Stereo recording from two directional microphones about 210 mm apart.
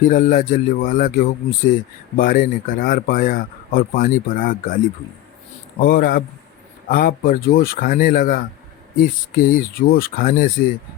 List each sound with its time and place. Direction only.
0.0 s speech: 40° left (ahead or behind)
5.8 s speech: 45° left (ahead or behind)